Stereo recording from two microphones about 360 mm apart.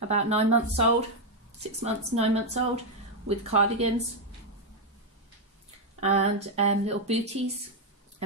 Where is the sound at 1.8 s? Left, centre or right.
Centre.